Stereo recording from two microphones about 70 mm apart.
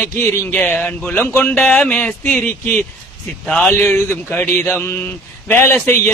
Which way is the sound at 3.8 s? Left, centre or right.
Left.